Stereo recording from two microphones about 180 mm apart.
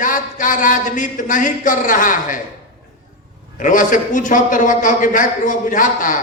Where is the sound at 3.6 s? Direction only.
45° left (ahead or behind).